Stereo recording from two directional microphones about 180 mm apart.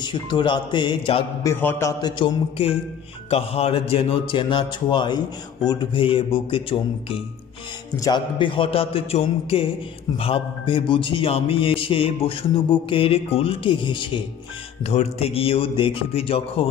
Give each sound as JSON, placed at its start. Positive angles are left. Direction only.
{"t": 0.0, "sound": "speech", "side_deg": 25}
{"t": 1.4, "sound": "speech", "side_deg": 10}
{"t": 14.9, "sound": "speech", "side_deg": 35}